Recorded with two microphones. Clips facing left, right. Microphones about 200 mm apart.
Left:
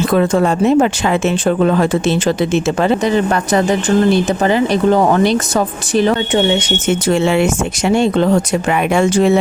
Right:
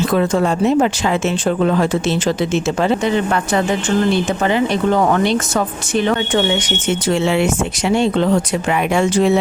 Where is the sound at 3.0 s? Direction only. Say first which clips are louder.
Left 3 dB; 40° left (ahead or behind).